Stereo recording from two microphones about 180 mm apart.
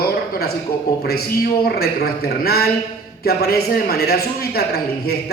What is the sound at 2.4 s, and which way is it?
A man's voice, 60° left (ahead or behind).